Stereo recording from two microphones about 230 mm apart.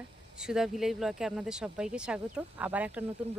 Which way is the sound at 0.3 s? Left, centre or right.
Centre.